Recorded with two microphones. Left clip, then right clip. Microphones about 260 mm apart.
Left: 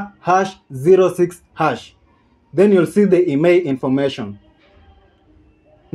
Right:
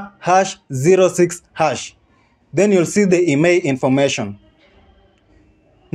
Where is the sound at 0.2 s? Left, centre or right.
Right.